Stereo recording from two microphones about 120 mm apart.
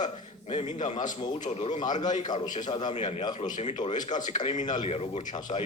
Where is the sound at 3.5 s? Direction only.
70° left (ahead or behind).